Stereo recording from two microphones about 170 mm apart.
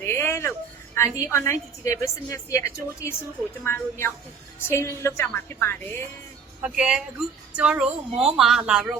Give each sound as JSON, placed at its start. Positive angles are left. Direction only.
{"t": 0.0, "sound": "a sound", "side_deg": 15}
{"t": 0.9, "sound": "a woman's voice", "side_deg": 15}
{"t": 6.6, "sound": "speech", "side_deg": -5}